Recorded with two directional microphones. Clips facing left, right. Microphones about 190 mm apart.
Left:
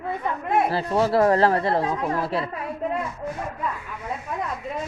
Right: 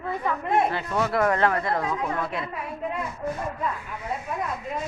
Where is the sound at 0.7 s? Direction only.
35° left (ahead or behind).